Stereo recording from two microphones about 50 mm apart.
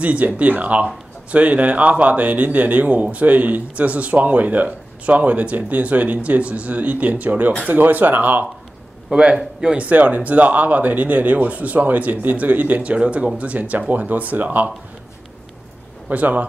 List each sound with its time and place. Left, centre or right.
0.0 s speech: right
9.1 s speech: centre
9.8 s speech: right
16.1 s speech: right